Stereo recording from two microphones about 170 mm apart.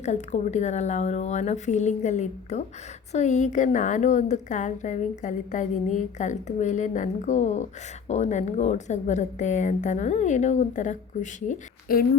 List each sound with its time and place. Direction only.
0.0 s a woman's voice: 45° left (ahead or behind)